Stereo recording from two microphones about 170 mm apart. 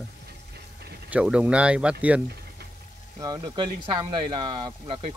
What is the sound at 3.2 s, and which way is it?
Speech, 25° right (ahead or behind).